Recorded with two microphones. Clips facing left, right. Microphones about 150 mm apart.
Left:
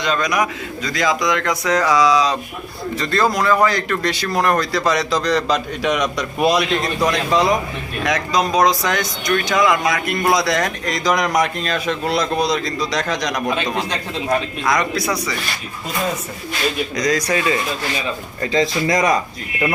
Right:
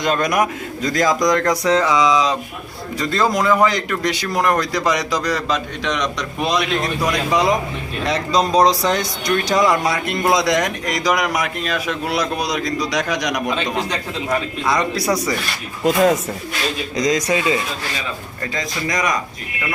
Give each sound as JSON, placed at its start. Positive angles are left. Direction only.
{"t": 0.0, "sound": "a man's voice", "side_deg": -50}
{"t": 1.8, "sound": "speech", "side_deg": -20}
{"t": 5.5, "sound": "a man's voice", "side_deg": 5}
{"t": 7.1, "sound": "speech", "side_deg": -20}
{"t": 8.0, "sound": "speech", "side_deg": -30}
{"t": 14.7, "sound": "speech", "side_deg": -35}
{"t": 15.8, "sound": "speech", "side_deg": -90}
{"t": 17.0, "sound": "speech", "side_deg": -20}
{"t": 18.5, "sound": "speech", "side_deg": 30}